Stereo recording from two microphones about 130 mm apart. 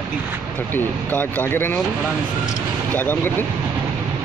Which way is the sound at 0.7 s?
15° left (ahead or behind).